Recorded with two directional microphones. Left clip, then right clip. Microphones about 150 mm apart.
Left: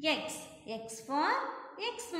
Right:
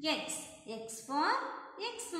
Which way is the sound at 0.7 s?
15° left (ahead or behind).